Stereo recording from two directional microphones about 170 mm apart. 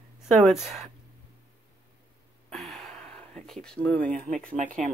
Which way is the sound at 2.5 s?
Centre (ahead or behind).